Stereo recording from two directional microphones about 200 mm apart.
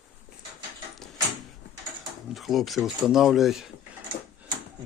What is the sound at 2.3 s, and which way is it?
Speech, centre (ahead or behind).